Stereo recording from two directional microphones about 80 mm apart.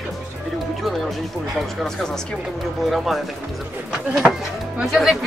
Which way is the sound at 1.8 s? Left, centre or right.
Centre.